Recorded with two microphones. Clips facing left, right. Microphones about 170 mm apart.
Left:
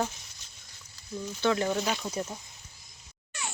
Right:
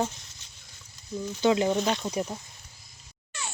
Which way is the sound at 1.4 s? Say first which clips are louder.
Right 4 dB; 15° right (ahead or behind).